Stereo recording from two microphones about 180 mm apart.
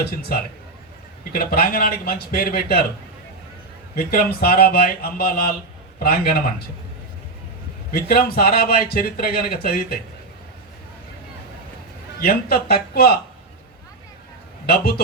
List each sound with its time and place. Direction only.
0.3 s a man's voice: 55° left (ahead or behind)
3.9 s speech: 55° left (ahead or behind)
7.9 s speech: 60° left (ahead or behind)
12.2 s speech: 55° left (ahead or behind)
14.7 s speech: 55° left (ahead or behind)